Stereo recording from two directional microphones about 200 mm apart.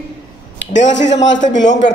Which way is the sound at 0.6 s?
65° left (ahead or behind).